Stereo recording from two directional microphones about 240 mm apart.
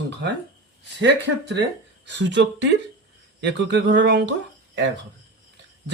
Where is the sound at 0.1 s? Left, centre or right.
Right.